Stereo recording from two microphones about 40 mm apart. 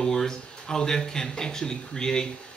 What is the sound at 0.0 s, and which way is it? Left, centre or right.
A man's voice, centre.